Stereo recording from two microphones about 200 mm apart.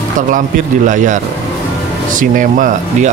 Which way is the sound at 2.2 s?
40° right (ahead or behind).